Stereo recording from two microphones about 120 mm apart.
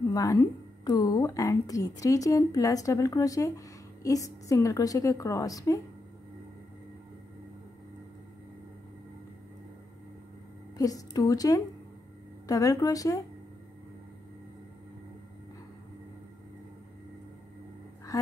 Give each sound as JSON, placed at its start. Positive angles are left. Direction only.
{"t": 0.1, "sound": "speech", "side_deg": 30}
{"t": 10.8, "sound": "speech", "side_deg": 30}